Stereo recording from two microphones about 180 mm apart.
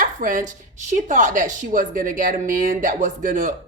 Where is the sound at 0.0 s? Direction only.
50° right (ahead or behind).